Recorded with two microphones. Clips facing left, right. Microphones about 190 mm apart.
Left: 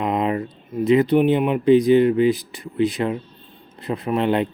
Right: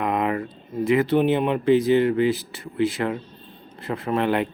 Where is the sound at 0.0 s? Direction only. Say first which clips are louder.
Left 2 dB; 20° left (ahead or behind).